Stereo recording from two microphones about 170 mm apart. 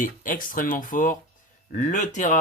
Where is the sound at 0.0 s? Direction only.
50° left (ahead or behind).